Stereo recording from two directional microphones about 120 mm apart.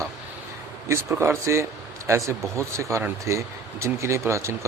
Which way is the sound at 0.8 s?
25° right (ahead or behind).